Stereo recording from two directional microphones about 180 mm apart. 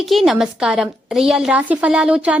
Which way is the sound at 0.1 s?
Centre (ahead or behind).